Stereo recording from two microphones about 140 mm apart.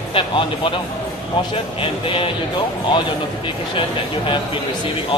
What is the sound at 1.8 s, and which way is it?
Speech, 40° left (ahead or behind).